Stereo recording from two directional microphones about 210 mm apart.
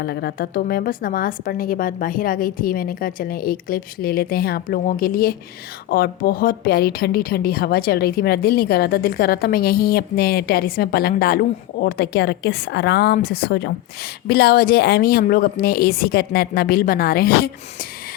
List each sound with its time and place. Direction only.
0.0 s speech: 50° left (ahead or behind)